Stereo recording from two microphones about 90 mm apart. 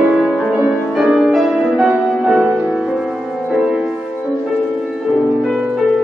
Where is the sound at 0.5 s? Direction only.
15° right (ahead or behind).